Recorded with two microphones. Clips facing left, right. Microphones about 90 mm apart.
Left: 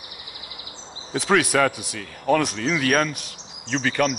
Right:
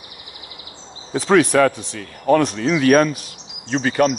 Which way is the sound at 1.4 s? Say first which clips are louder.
Right 5 dB; 5° left (ahead or behind).